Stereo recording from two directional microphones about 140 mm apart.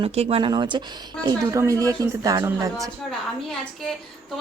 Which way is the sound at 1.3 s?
20° right (ahead or behind).